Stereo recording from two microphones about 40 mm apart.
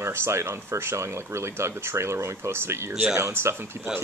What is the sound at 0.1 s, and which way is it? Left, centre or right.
Speech, right.